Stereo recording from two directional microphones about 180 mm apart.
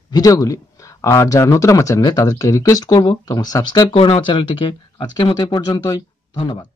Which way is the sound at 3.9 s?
30° left (ahead or behind).